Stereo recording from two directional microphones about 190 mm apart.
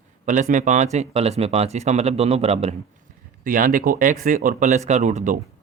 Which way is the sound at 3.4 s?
45° right (ahead or behind).